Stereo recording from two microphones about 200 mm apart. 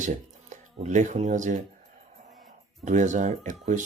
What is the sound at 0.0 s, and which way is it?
Speech, 35° right (ahead or behind).